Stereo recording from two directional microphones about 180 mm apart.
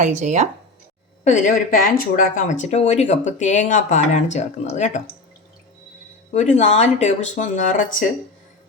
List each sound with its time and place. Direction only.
0.0 s speech: 40° right (ahead or behind)
1.2 s speech: 45° left (ahead or behind)
6.3 s speech: 40° left (ahead or behind)